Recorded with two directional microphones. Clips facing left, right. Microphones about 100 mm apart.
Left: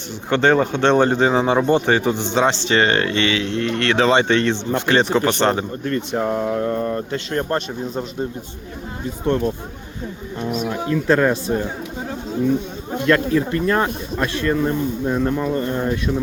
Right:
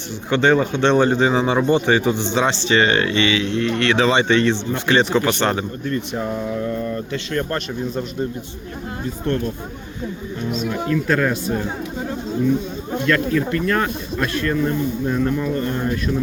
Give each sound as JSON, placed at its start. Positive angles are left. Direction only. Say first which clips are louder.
{"t": 0.3, "sound": "a man's voice", "louder": "even", "side_deg": 45}
{"t": 5.8, "sound": "a man's voice", "louder": "left 2 dB", "side_deg": 55}
{"t": 9.2, "sound": "speech", "louder": "left 3 dB", "side_deg": 20}
{"t": 10.8, "sound": "speech", "louder": "left 3 dB", "side_deg": 25}
{"t": 13.1, "sound": "speech", "louder": "left 2 dB", "side_deg": 30}